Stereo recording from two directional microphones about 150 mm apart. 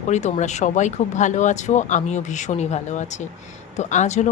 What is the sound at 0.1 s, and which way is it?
Speech, 50° left (ahead or behind).